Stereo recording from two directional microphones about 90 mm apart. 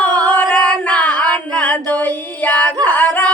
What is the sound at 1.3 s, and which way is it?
Singing, 15° left (ahead or behind).